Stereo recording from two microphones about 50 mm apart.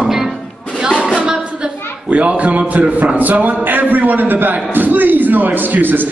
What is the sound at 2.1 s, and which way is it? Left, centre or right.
A man's voice, right.